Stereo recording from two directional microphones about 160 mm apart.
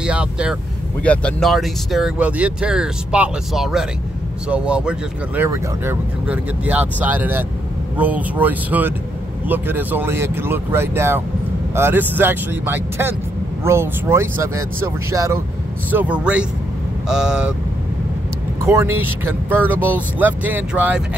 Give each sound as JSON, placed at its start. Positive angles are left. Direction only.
{"t": 0.0, "sound": "speech", "side_deg": -5}
{"t": 1.0, "sound": "speech", "side_deg": 5}
{"t": 18.7, "sound": "speech", "side_deg": -15}